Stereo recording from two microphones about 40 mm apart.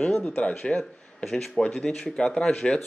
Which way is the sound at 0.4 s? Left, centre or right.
Left.